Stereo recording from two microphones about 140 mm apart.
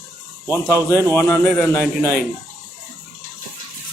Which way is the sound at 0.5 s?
20° left (ahead or behind).